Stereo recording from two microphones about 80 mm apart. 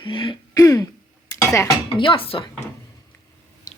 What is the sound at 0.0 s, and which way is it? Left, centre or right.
Throat clearing, left.